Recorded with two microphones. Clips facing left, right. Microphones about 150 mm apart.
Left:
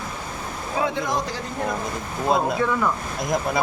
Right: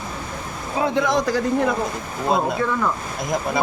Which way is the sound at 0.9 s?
80° right.